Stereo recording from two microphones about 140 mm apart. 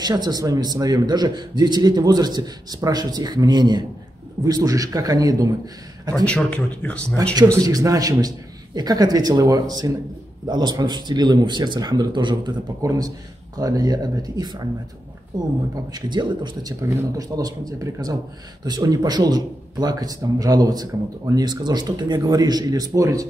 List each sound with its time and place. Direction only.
0.0 s a man's voice: 30° right (ahead or behind)
6.2 s speech: 10° left (ahead or behind)
7.6 s a man's voice: 25° right (ahead or behind)
15.7 s speech: 30° right (ahead or behind)
16.8 s a man's voice: 20° right (ahead or behind)